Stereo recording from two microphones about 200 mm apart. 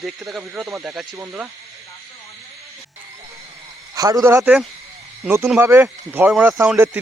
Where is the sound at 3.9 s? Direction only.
15° right (ahead or behind).